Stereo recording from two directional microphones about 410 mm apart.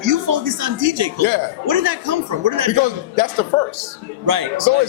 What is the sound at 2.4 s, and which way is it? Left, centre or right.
Speech, right.